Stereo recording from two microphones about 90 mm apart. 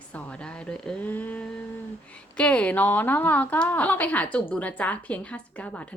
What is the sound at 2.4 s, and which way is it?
A woman's voice, 15° left (ahead or behind).